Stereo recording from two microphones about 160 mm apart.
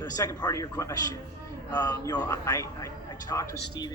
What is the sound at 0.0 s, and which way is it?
A man's voice, 25° left (ahead or behind).